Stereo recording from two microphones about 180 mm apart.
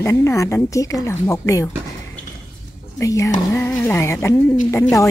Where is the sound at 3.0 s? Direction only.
15° left (ahead or behind).